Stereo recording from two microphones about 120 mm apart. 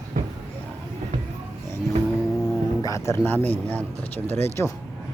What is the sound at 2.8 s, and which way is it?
Speech, 25° left (ahead or behind).